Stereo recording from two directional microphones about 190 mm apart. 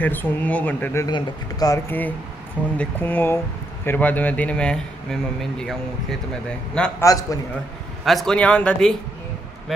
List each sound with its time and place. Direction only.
0.0 s a man's voice: 10° left (ahead or behind)
1.0 s a man's voice: 20° left (ahead or behind); by 6.1 s centre (ahead or behind)
7.0 s a man's voice: 15° left (ahead or behind)
8.0 s speech: centre (ahead or behind)